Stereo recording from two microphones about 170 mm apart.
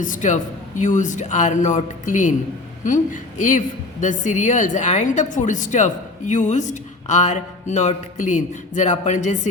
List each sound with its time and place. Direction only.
0.0 s a woman's voice: 50° left (ahead or behind)